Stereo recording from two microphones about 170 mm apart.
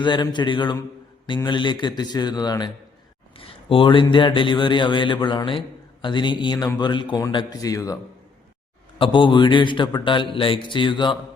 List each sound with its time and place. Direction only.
0.0 s speech: 25° left (ahead or behind)
9.0 s speech: 30° left (ahead or behind)